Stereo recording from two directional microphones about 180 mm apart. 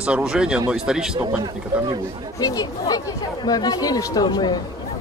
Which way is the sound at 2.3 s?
20° left (ahead or behind).